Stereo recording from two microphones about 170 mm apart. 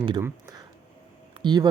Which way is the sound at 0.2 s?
15° right (ahead or behind).